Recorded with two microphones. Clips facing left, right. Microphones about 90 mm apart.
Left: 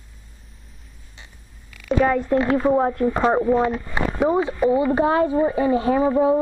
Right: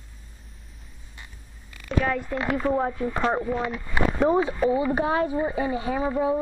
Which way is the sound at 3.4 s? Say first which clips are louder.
Left 8 dB; 35° left (ahead or behind).